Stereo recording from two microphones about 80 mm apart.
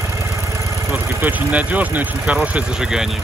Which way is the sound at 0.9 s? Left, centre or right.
Right.